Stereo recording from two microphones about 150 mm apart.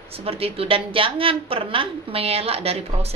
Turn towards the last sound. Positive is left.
turn(degrees=-45)  # may be behind; listen again after turning